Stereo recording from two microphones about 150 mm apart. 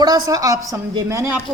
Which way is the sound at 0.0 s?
25° right (ahead or behind).